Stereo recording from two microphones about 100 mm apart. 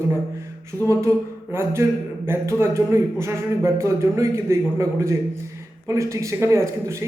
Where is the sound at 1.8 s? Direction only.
25° right (ahead or behind).